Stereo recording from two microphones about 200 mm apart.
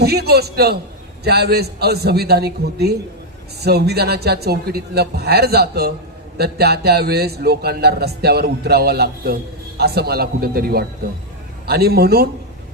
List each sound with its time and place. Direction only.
0.0 s a man's voice: 55° right (ahead or behind)